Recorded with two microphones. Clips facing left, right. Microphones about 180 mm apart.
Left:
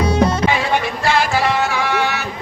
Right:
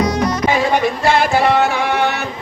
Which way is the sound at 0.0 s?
30° left (ahead or behind).